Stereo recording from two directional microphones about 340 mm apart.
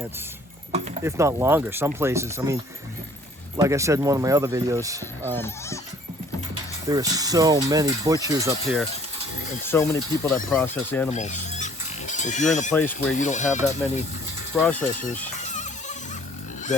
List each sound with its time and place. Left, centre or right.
0.7 s speech: centre
3.6 s speech: centre
5.3 s speech: centre
6.8 s speech: centre
11.1 s pig: left
13.1 s speech: left
14.5 s speech: centre